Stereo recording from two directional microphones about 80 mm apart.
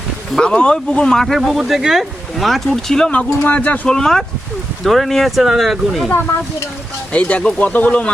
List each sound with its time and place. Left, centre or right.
0.3 s speech: centre
3.1 s speech: centre
3.8 s speech: centre
7.1 s speech: centre